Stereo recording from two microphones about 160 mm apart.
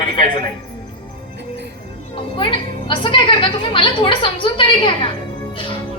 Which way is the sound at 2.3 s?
30° left (ahead or behind).